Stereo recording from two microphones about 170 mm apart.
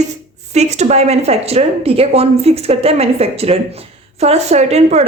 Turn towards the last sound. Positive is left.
turn(degrees=-40)  # may be behind; listen again after turning